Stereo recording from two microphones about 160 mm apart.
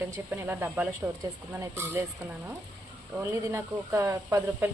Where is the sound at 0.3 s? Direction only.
15° right (ahead or behind).